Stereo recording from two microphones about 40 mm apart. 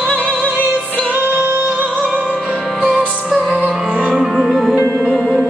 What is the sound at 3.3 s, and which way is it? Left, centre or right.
Music, centre.